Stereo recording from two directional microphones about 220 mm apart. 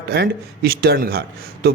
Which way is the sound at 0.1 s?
45° right (ahead or behind).